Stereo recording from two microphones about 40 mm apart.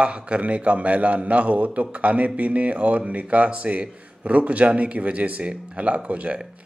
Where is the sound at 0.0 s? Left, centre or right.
Right.